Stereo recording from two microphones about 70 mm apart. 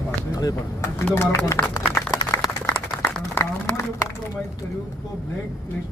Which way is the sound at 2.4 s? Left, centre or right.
Left.